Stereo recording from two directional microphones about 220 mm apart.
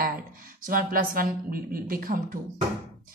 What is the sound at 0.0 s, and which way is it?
A woman's voice, 40° right (ahead or behind).